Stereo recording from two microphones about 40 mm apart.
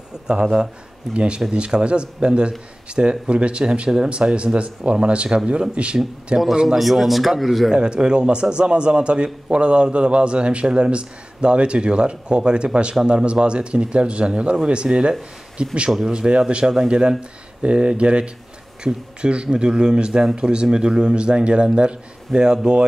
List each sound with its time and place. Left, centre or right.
0.3 s a man's voice: right
6.8 s speech: centre
7.7 s a man's voice: right